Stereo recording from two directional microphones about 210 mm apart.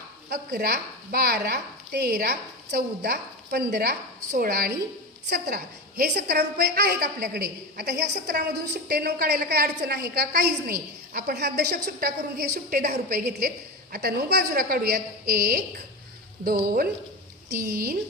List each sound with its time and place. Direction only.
0.3 s a woman's voice: 45° right (ahead or behind)
6.0 s a woman's voice: 45° right (ahead or behind)